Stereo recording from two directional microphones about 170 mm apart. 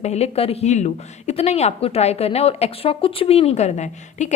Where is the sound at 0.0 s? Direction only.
40° left (ahead or behind).